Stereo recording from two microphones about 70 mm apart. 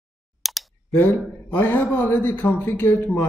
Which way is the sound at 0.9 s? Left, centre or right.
Left.